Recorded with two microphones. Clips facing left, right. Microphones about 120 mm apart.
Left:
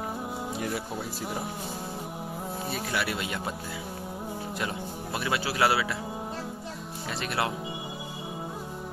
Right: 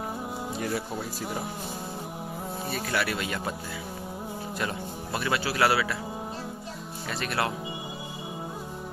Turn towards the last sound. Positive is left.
turn(degrees=15)  # may be behind; listen again after turning